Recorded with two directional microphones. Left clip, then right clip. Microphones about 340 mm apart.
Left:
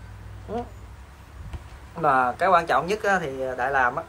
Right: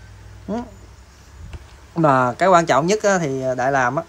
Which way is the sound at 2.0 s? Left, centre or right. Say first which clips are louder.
Right 5 dB; right.